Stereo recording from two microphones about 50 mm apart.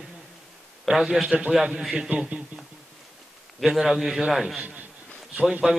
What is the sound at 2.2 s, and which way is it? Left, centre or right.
Speech, right.